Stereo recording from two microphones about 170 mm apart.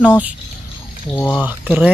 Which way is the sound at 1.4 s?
10° right (ahead or behind).